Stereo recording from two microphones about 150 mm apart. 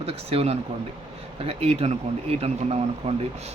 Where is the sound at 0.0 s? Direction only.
40° right (ahead or behind).